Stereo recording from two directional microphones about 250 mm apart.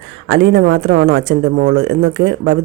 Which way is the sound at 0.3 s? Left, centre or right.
Right.